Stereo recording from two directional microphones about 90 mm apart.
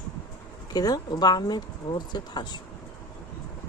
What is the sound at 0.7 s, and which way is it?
Speech, 45° left (ahead or behind).